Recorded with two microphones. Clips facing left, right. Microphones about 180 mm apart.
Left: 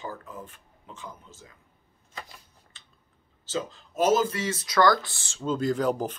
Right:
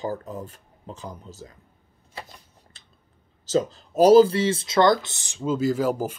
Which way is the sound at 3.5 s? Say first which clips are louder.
Right 9 dB; 40° right (ahead or behind).